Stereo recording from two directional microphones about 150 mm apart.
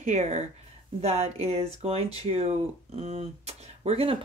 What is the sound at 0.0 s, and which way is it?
Speech, 50° right (ahead or behind).